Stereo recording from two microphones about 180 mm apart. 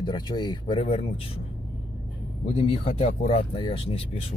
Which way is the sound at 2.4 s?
30° left (ahead or behind).